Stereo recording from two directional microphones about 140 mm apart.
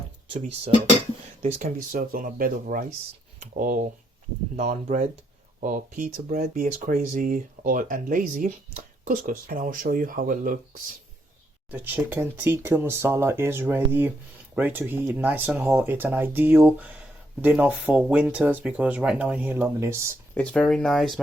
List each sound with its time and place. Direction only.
1.4 s speech: 55° right (ahead or behind)
1.9 s speech: 85° right
4.5 s speech: 55° right (ahead or behind)
5.5 s speech: 65° right (ahead or behind)
11.7 s speech: 15° right (ahead or behind)
20.3 s speech: 10° left (ahead or behind)